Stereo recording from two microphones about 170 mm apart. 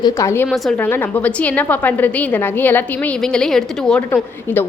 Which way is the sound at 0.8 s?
10° left (ahead or behind).